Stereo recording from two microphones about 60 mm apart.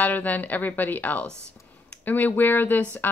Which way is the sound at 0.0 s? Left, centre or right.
Left.